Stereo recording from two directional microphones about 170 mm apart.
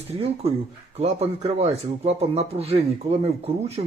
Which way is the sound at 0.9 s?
40° right (ahead or behind).